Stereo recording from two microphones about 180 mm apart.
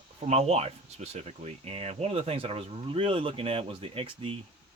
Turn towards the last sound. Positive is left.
turn(degrees=-30)  # may be behind; listen again after turning